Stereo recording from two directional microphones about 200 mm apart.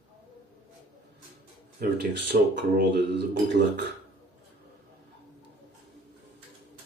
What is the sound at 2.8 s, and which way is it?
Speech, 55° right (ahead or behind).